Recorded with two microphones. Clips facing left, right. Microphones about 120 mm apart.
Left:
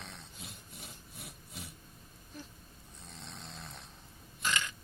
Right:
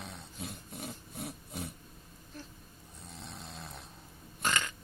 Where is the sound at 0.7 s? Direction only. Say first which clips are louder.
Right 8 dB; 50° right (ahead or behind).